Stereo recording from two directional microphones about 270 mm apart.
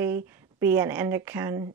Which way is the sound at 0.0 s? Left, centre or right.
Centre.